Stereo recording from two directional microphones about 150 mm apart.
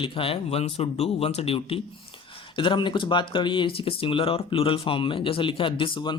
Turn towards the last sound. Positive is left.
turn(degrees=30)  # may be behind; listen again after turning